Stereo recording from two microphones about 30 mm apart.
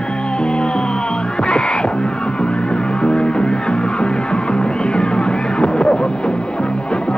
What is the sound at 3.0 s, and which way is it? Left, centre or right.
Music, left.